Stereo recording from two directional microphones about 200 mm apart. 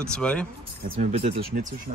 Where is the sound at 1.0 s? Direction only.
30° right (ahead or behind).